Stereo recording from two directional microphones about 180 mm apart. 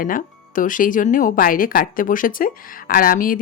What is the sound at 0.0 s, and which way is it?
A woman's voice, 50° left (ahead or behind).